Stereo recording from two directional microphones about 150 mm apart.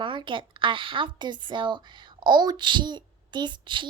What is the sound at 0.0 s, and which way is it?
A woman's voice, 35° right (ahead or behind).